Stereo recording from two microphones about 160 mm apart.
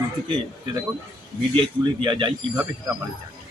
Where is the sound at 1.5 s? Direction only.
30° right (ahead or behind).